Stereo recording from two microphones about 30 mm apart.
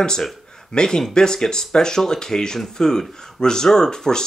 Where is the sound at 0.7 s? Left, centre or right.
Left.